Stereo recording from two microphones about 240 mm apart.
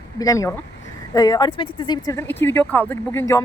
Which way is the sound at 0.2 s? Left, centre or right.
Centre.